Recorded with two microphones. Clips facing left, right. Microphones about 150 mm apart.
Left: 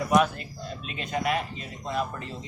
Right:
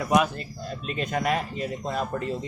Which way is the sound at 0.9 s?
45° right (ahead or behind).